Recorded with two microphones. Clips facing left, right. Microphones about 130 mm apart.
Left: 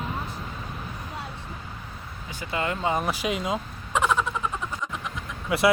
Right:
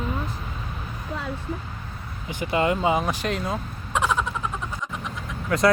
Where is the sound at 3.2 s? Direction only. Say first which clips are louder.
Even; 10° left (ahead or behind).